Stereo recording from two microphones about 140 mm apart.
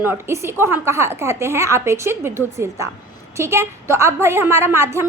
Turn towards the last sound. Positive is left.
turn(degrees=-20)  # may be behind; listen again after turning